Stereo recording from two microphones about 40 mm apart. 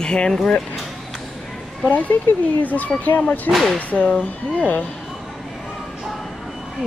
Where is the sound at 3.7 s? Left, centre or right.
Left.